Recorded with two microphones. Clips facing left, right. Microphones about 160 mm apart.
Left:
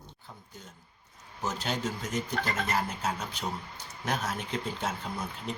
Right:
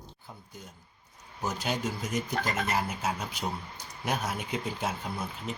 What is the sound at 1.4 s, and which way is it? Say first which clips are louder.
Speech: right 1 dB; 10° right (ahead or behind).